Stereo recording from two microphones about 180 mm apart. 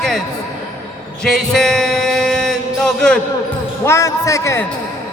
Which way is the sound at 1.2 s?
5° left (ahead or behind).